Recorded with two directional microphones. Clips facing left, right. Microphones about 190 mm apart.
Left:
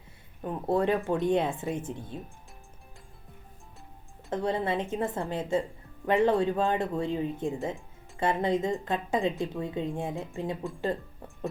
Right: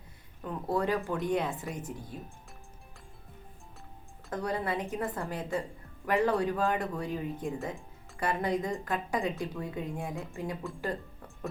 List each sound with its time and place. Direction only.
0.4 s speech: 25° left (ahead or behind)
4.3 s speech: 25° left (ahead or behind)